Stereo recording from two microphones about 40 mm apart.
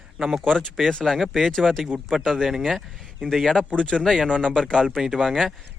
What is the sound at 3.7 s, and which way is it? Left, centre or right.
Speech, left.